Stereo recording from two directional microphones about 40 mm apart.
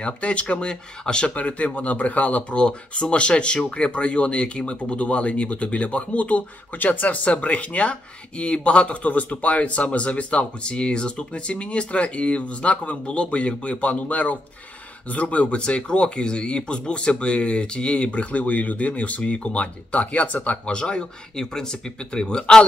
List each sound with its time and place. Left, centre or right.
0.0 s speech: left
1.3 s speech: left
2.5 s speech: left
7.2 s speech: left
20.6 s speech: left